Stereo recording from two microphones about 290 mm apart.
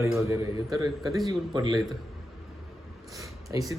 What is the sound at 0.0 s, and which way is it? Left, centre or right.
A man's voice, centre.